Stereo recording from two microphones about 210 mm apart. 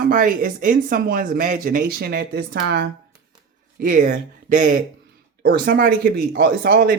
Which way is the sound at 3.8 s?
40° right (ahead or behind).